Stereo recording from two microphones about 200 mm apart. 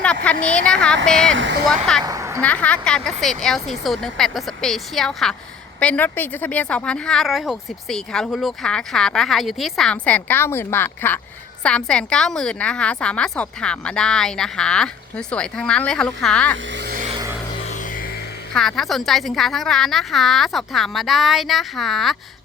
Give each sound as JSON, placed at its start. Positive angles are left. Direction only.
{"t": 0.0, "sound": "speech", "side_deg": 5}
{"t": 2.0, "sound": "a sound", "side_deg": -15}
{"t": 2.4, "sound": "speech", "side_deg": 5}
{"t": 16.7, "sound": "vehicle", "side_deg": -55}
{"t": 18.5, "sound": "speech", "side_deg": 0}